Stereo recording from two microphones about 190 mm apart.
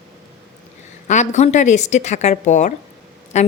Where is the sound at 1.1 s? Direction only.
40° left (ahead or behind).